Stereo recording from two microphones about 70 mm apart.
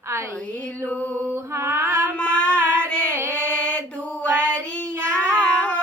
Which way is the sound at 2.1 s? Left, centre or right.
Centre.